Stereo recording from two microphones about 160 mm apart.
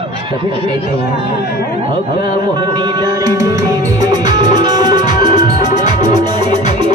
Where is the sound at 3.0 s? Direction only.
20° right (ahead or behind).